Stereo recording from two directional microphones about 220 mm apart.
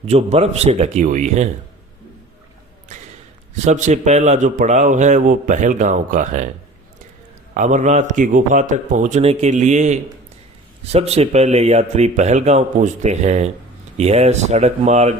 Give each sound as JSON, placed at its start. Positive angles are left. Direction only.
{"t": 0.1, "sound": "speech", "side_deg": -30}
{"t": 3.5, "sound": "speech", "side_deg": -35}
{"t": 7.5, "sound": "speech", "side_deg": -35}